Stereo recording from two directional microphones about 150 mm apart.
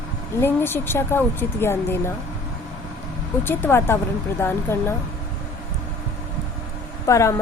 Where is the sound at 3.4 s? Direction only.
15° left (ahead or behind).